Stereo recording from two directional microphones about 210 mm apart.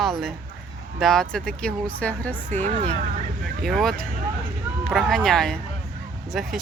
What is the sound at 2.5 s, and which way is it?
Speech, 35° right (ahead or behind).